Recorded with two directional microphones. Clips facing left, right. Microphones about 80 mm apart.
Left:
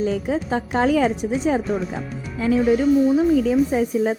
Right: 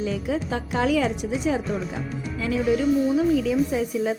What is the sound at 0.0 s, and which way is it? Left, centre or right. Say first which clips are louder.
Speech: left 4 dB; left.